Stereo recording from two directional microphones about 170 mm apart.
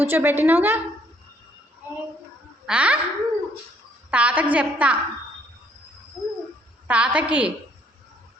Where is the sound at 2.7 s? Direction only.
10° right (ahead or behind).